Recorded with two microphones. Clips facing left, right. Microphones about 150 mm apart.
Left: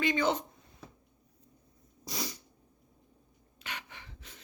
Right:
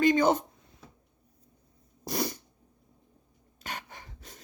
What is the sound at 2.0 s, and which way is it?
Sneeze, 55° right (ahead or behind).